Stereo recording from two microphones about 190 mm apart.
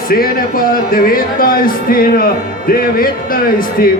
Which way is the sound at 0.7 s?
50° left (ahead or behind).